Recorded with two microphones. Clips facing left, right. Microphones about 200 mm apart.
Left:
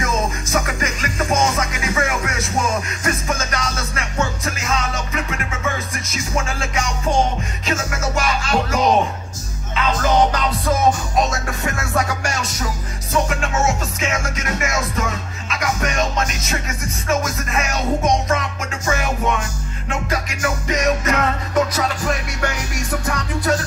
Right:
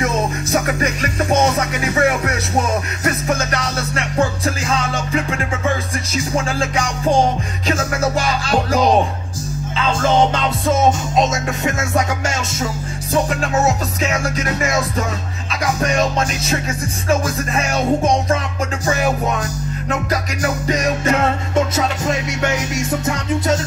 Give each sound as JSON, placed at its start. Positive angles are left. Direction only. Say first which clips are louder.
{"t": 0.0, "sound": "music", "louder": "right 3 dB", "side_deg": -35}
{"t": 13.1, "sound": "music", "louder": "right 3 dB", "side_deg": -35}